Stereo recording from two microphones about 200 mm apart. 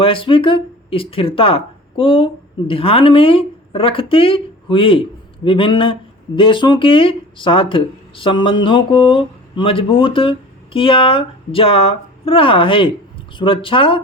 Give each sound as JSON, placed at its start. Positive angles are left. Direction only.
{"t": 0.0, "sound": "speech", "side_deg": 25}